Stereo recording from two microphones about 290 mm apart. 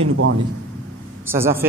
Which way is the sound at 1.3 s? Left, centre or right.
Centre.